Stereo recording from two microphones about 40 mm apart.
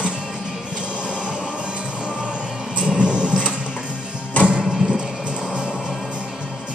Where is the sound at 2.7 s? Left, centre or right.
Right.